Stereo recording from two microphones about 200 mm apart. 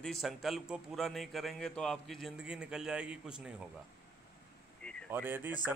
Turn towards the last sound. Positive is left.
turn(degrees=-10)  # may be behind; listen again after turning